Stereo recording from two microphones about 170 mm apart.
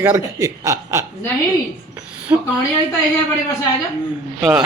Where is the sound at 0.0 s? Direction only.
15° right (ahead or behind).